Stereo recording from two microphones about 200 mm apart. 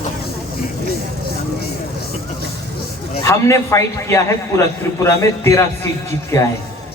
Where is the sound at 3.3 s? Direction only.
15° left (ahead or behind).